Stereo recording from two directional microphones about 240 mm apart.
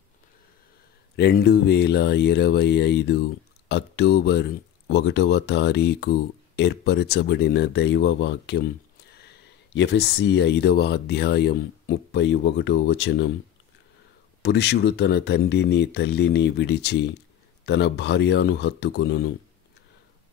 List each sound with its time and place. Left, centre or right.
1.1 s speech: left
9.8 s speech: left
14.4 s speech: left